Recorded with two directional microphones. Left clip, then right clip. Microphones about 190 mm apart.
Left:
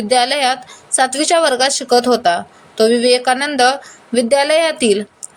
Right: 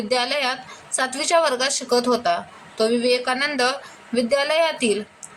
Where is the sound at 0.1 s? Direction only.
25° left (ahead or behind).